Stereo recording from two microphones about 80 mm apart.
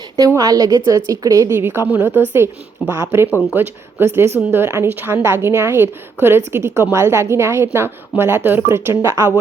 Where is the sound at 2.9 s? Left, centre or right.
Right.